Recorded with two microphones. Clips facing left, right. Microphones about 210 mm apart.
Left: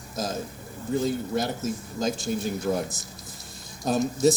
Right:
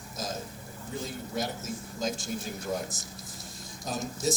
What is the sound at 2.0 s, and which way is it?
Speech, 65° left (ahead or behind).